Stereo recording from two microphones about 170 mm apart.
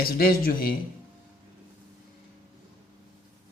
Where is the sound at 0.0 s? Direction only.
60° left (ahead or behind).